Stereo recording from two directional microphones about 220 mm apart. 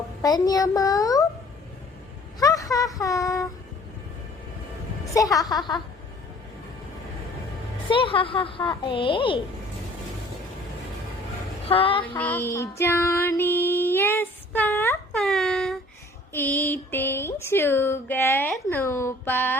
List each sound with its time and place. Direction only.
0.2 s speech: 15° left (ahead or behind)
2.4 s speech: 15° left (ahead or behind)
5.4 s a woman's voice: 20° left (ahead or behind)
7.9 s a woman's voice: 25° left (ahead or behind)
11.7 s a woman's voice: 25° left (ahead or behind)
12.0 s music: 5° left (ahead or behind)
16.3 s speech: 10° left (ahead or behind)